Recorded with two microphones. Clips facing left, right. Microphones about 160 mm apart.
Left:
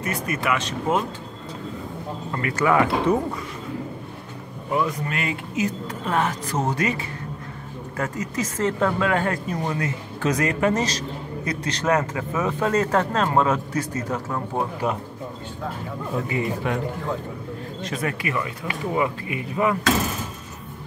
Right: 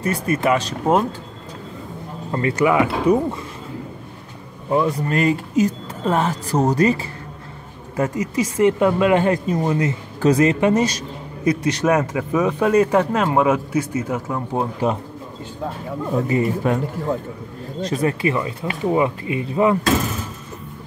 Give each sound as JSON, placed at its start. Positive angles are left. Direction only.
{"t": 0.0, "sound": "speech", "side_deg": -35}
{"t": 2.3, "sound": "speech", "side_deg": -30}
{"t": 2.6, "sound": "a man's voice", "side_deg": -15}
{"t": 4.6, "sound": "speech", "side_deg": -30}
{"t": 7.9, "sound": "speech", "side_deg": -20}
{"t": 10.7, "sound": "a man's voice", "side_deg": -15}
{"t": 14.8, "sound": "speech", "side_deg": -25}
{"t": 16.3, "sound": "speech", "side_deg": -40}
{"t": 17.8, "sound": "speech", "side_deg": -30}